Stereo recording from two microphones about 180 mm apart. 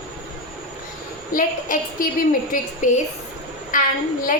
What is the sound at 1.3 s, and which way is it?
A woman's voice, 50° left (ahead or behind).